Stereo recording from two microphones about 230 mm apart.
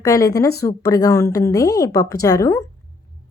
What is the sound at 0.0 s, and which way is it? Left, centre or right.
A woman's voice, centre.